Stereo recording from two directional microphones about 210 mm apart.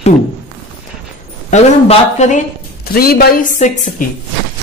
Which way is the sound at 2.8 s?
45° left (ahead or behind).